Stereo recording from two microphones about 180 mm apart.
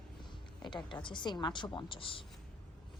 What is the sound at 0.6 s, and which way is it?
A woman's voice, 25° left (ahead or behind).